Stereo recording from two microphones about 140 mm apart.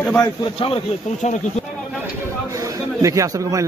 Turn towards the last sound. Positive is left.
turn(degrees=-25)  # may be behind; listen again after turning